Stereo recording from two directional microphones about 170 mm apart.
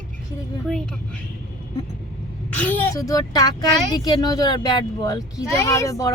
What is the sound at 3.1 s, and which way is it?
A child's voice, 20° left (ahead or behind).